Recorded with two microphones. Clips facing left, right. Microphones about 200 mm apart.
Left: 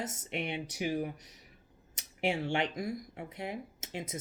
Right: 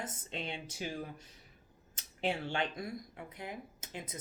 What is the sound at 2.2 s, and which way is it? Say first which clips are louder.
Speech: left 3 dB; 25° left (ahead or behind).